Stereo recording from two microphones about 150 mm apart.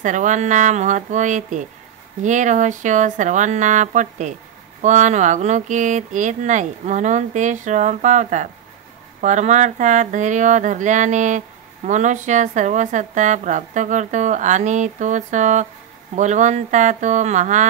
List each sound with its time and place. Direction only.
0.0 s speech: 55° right (ahead or behind)